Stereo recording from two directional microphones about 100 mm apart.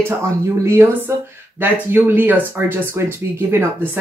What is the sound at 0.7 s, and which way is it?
Speech, 25° right (ahead or behind).